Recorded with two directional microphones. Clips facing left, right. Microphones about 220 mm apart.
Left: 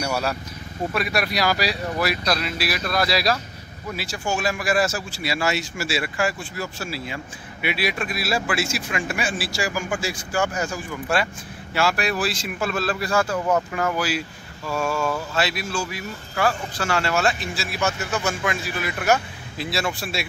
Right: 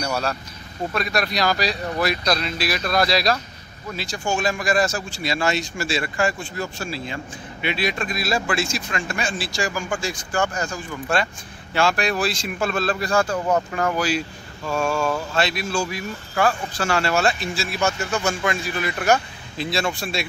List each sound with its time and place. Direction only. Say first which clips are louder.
0.0 s a man's voice: even; 10° left (ahead or behind)
14.9 s speech: right 1 dB; 25° right (ahead or behind)
15.3 s speech: right 2 dB; 5° left (ahead or behind)
17.0 s speech: right 1 dB; 30° right (ahead or behind)
17.6 s speech: right 2 dB; 5° left (ahead or behind)